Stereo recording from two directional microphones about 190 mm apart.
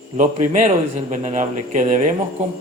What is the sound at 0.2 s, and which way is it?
Speech, 40° right (ahead or behind).